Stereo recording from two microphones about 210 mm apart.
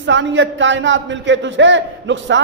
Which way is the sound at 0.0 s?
60° right (ahead or behind).